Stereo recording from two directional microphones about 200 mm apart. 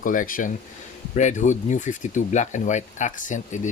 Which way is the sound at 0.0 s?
40° left (ahead or behind).